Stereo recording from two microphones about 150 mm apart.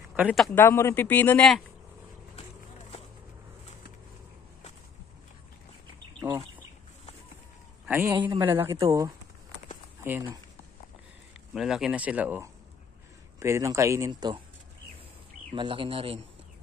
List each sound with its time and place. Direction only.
0.5 s speech: 15° left (ahead or behind)
6.1 s duck: 25° right (ahead or behind)
7.8 s a man's voice: 15° right (ahead or behind)
8.2 s speech: 30° right (ahead or behind)
8.5 s speech: 15° right (ahead or behind)
11.5 s speech: 5° right (ahead or behind); by 14.3 s 20° right (ahead or behind)
15.5 s speech: 35° right (ahead or behind)